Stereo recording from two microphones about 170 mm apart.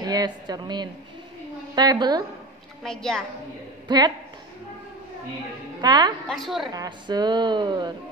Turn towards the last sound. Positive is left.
turn(degrees=-25)  # may be behind; listen again after turning